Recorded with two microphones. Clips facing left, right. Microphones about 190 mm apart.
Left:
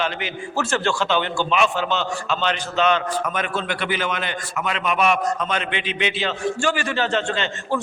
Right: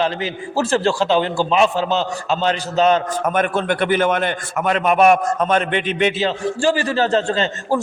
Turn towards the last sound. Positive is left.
turn(degrees=-35)  # may be behind; listen again after turning